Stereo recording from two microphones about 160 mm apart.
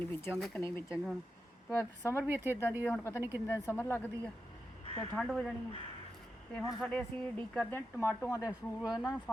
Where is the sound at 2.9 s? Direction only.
15° left (ahead or behind).